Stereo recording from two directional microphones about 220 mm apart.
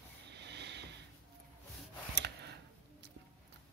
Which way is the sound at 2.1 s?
50° right (ahead or behind).